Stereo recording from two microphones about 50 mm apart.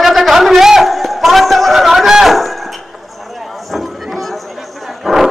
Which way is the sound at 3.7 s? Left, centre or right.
Centre.